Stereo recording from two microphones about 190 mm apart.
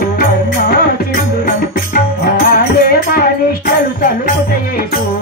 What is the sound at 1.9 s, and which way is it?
Music, 50° left (ahead or behind).